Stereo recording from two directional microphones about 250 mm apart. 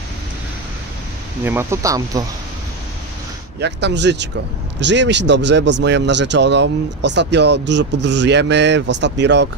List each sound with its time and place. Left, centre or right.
1.4 s speech: centre
3.5 s speech: right